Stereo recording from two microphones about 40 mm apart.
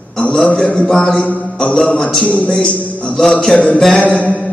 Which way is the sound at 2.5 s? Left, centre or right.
Left.